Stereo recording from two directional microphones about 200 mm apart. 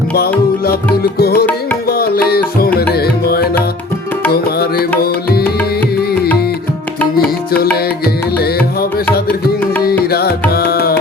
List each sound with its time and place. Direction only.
1.0 s music: 50° left (ahead or behind)
7.5 s music: 50° left (ahead or behind)